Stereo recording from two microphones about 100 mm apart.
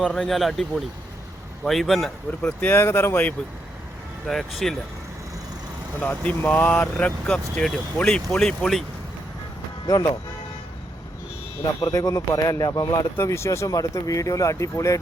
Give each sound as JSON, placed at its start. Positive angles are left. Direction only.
{"t": 0.0, "sound": "speech", "side_deg": 0}
{"t": 1.6, "sound": "speech", "side_deg": 0}
{"t": 2.4, "sound": "speech", "side_deg": 15}
{"t": 4.3, "sound": "speech", "side_deg": 5}
{"t": 6.0, "sound": "speech", "side_deg": 15}
{"t": 9.8, "sound": "speech", "side_deg": 35}
{"t": 11.6, "sound": "speech", "side_deg": 35}
{"t": 13.1, "sound": "speech", "side_deg": 25}